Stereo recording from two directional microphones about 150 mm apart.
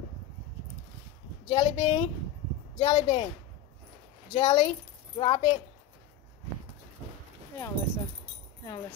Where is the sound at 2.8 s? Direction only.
30° left (ahead or behind).